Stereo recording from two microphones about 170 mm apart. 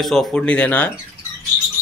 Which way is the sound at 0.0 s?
Centre (ahead or behind).